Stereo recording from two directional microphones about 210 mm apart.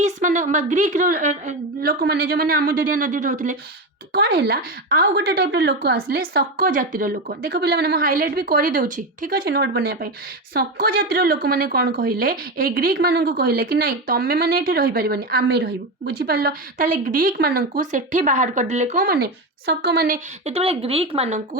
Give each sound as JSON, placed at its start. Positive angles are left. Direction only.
{"t": 0.0, "sound": "speech", "side_deg": -35}
{"t": 4.1, "sound": "a woman's voice", "side_deg": -50}